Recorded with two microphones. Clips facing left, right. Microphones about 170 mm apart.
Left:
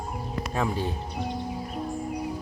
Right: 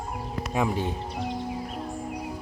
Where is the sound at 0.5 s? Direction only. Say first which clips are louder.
Right 2 dB; 15° right (ahead or behind).